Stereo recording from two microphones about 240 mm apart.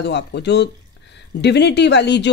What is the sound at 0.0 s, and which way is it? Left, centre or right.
Speech, left.